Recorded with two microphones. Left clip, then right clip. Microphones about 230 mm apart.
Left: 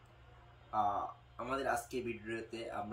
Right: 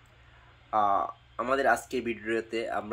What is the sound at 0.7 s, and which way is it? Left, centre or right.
Speech, right.